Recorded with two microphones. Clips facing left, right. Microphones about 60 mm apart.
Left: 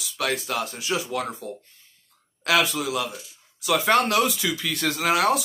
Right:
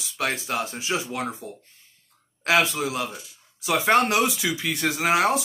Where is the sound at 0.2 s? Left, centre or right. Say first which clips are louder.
Even; right.